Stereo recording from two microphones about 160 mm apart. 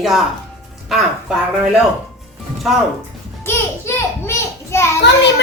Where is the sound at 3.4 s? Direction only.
15° left (ahead or behind).